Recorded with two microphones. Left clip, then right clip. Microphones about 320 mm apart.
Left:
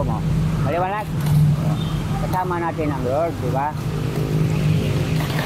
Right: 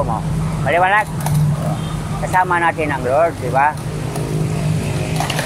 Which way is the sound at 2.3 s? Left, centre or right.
Right.